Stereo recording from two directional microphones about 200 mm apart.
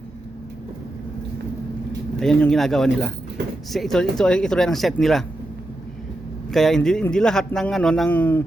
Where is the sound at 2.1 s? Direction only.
Centre (ahead or behind).